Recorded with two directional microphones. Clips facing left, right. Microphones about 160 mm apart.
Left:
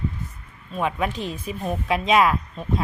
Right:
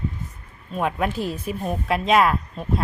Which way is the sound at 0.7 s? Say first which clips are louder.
Right 1 dB; 5° right (ahead or behind).